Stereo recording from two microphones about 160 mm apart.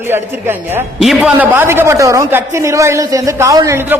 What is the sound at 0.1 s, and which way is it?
A man's voice, 15° right (ahead or behind).